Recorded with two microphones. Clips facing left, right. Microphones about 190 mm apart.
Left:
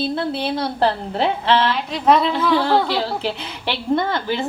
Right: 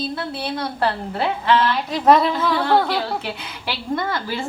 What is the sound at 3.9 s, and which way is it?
Speech, 25° left (ahead or behind).